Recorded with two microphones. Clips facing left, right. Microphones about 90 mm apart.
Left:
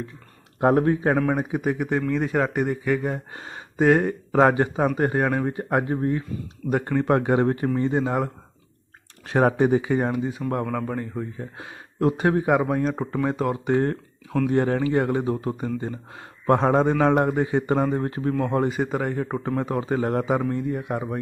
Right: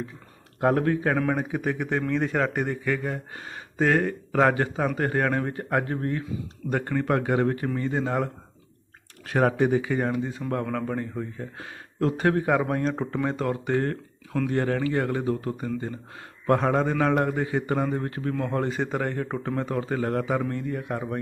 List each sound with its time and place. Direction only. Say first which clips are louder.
0.6 s a man's voice: left 3 dB; 25° left (ahead or behind)
7.1 s a man's voice: left 3 dB; 30° left (ahead or behind)
9.2 s a man's voice: left 3 dB; 30° left (ahead or behind)
10.5 s a man's voice: right 1 dB; 10° left (ahead or behind)
13.7 s a man's voice: left 4 dB; 20° left (ahead or behind)